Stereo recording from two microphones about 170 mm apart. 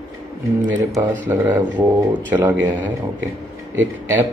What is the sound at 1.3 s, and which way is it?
Speech, 10° right (ahead or behind).